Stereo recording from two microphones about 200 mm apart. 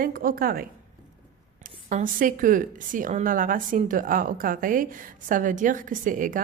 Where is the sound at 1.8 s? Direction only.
40° right (ahead or behind).